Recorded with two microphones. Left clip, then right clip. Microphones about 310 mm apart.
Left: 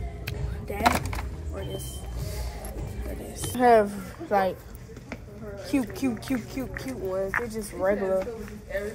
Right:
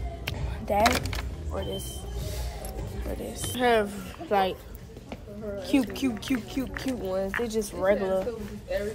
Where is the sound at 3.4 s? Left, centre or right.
Centre.